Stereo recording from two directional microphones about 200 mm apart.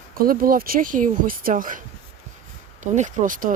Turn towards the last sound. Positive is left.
turn(degrees=-40)  # may be behind; listen again after turning